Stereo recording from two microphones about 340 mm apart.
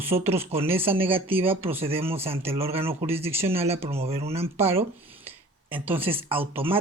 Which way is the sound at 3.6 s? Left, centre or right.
Centre.